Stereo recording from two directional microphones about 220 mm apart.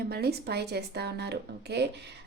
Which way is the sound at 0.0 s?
45° right (ahead or behind).